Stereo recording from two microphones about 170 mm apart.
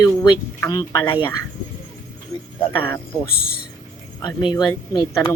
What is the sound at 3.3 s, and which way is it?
Speech, 65° left (ahead or behind).